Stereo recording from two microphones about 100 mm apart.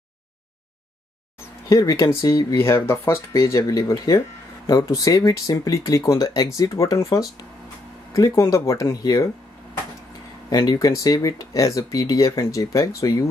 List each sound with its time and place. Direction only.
1.7 s speech: 35° left (ahead or behind)
10.5 s speech: 40° left (ahead or behind)